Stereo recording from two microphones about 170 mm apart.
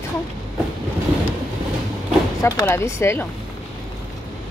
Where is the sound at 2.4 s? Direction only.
15° left (ahead or behind).